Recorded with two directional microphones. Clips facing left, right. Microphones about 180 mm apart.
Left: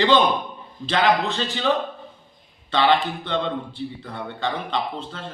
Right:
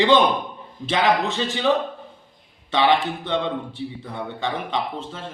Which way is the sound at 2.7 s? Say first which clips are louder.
Even; 10° right (ahead or behind).